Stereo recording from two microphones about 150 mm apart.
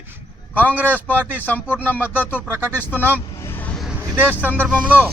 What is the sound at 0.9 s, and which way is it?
A man's voice, 10° left (ahead or behind).